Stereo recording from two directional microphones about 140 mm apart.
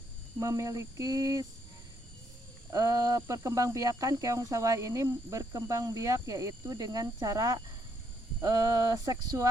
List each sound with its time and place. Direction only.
0.3 s speech: 25° right (ahead or behind)
2.6 s speech: 25° right (ahead or behind)